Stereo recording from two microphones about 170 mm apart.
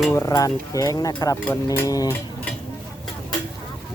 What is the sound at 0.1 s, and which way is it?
Speech, 20° left (ahead or behind).